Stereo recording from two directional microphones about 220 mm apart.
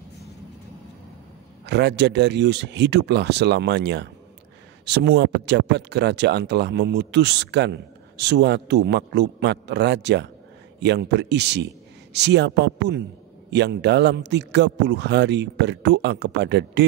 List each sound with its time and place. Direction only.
1.7 s speech: 50° right (ahead or behind)